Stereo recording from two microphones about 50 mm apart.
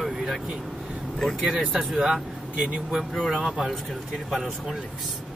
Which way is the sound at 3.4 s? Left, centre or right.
Centre.